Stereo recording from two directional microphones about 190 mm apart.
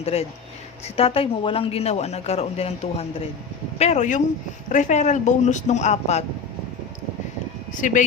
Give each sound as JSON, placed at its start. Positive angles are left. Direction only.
{"t": 0.0, "sound": "speech", "side_deg": 30}
{"t": 7.7, "sound": "speech", "side_deg": 40}